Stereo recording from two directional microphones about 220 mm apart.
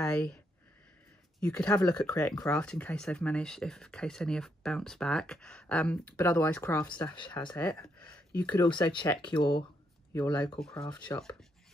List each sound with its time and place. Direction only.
0.0 s speech: 5° left (ahead or behind)
1.4 s speech: 5° left (ahead or behind)
7.3 s speech: 5° left (ahead or behind)
8.5 s speech: 20° left (ahead or behind)
10.6 s speech: 5° left (ahead or behind)
10.9 s speech: 20° left (ahead or behind)